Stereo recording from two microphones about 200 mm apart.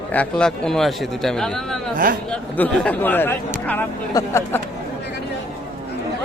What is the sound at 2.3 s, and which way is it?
A man's voice, 5° left (ahead or behind).